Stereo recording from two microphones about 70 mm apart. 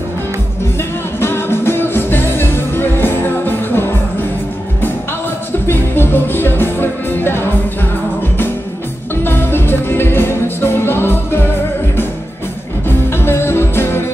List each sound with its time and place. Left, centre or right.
1.2 s music: left
5.7 s music: left
9.2 s music: left
13.2 s music: left